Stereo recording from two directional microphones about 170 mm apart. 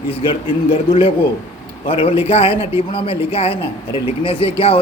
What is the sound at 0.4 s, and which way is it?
Speech, 35° left (ahead or behind).